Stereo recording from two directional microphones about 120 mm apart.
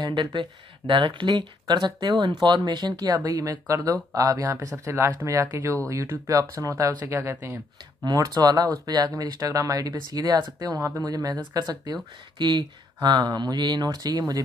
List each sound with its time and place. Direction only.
0.0 s speech: 35° right (ahead or behind)
8.0 s speech: 35° right (ahead or behind)